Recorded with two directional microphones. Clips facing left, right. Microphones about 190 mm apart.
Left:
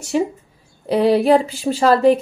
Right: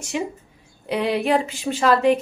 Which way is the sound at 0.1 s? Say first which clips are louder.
Left 7 dB; 35° left (ahead or behind).